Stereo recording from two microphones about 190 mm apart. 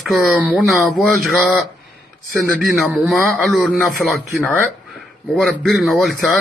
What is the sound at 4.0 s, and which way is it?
Speech, 10° left (ahead or behind).